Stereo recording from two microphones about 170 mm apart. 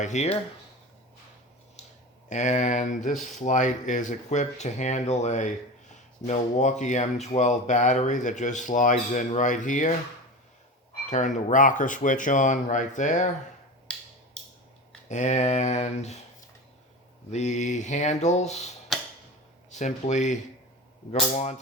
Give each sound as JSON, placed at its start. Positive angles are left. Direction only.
{"t": 0.0, "sound": "speech", "side_deg": 45}
{"t": 2.3, "sound": "speech", "side_deg": 45}
{"t": 11.1, "sound": "speech", "side_deg": 45}
{"t": 15.1, "sound": "speech", "side_deg": 45}
{"t": 17.3, "sound": "speech", "side_deg": 45}
{"t": 18.9, "sound": "tick-tock", "side_deg": 0}
{"t": 19.7, "sound": "speech", "side_deg": 45}